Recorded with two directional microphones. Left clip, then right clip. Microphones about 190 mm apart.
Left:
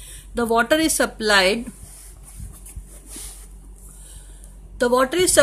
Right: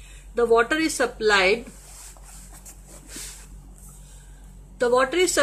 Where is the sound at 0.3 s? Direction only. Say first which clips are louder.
Left 1 dB; 45° left (ahead or behind).